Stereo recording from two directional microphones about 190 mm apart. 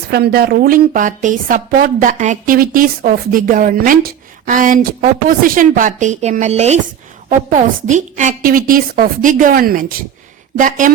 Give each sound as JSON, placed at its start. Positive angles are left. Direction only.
{"t": 0.1, "sound": "a woman's voice", "side_deg": -55}